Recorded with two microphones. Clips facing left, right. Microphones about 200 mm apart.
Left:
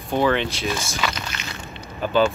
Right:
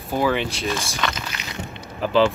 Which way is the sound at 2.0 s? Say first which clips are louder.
Right 1 dB; 90° right.